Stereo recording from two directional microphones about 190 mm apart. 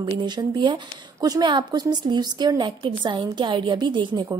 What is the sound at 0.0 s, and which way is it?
A woman's voice, 25° right (ahead or behind).